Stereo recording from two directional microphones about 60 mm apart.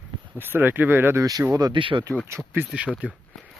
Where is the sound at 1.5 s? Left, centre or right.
Right.